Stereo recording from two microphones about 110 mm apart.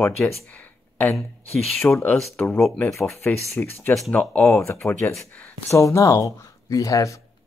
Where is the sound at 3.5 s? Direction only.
20° left (ahead or behind).